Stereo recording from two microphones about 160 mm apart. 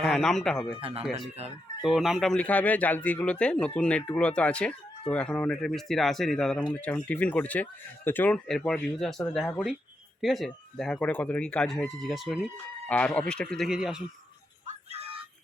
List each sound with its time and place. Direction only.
0.0 s speech: 5° left (ahead or behind)
0.8 s speech: 35° right (ahead or behind)
1.8 s speech: centre (ahead or behind)
14.7 s music: 40° right (ahead or behind)